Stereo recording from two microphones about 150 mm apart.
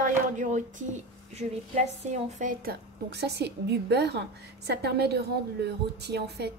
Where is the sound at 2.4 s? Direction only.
70° right (ahead or behind).